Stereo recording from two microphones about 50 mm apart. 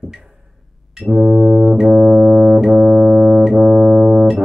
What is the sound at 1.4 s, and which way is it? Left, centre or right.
Brass instrument, centre.